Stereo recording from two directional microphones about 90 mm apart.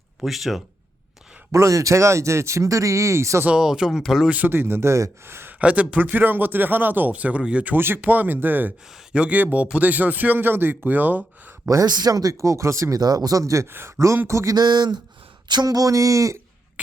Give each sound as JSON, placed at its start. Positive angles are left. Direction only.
{"t": 0.2, "sound": "speech", "side_deg": 0}
{"t": 1.5, "sound": "speech", "side_deg": -35}
{"t": 3.4, "sound": "speech", "side_deg": -10}
{"t": 4.3, "sound": "speech", "side_deg": -20}
{"t": 5.5, "sound": "speech", "side_deg": -15}
{"t": 11.7, "sound": "speech", "side_deg": -45}
{"t": 14.5, "sound": "speech", "side_deg": -50}